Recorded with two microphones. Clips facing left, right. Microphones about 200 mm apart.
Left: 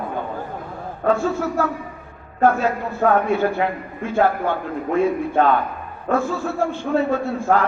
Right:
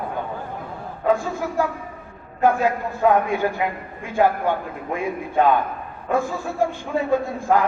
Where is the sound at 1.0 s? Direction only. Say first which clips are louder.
Left 2 dB; 15° right (ahead or behind).